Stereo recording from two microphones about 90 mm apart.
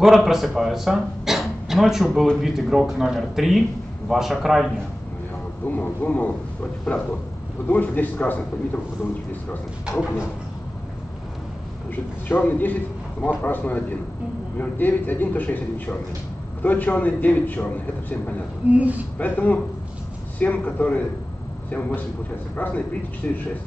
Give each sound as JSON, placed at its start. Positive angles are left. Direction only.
{"t": 0.0, "sound": "speech", "side_deg": -5}
{"t": 5.7, "sound": "speech", "side_deg": 15}
{"t": 7.6, "sound": "a man's voice", "side_deg": 20}
{"t": 11.9, "sound": "a man's voice", "side_deg": 20}
{"t": 18.7, "sound": "speech", "side_deg": -15}
{"t": 19.1, "sound": "a man's voice", "side_deg": 20}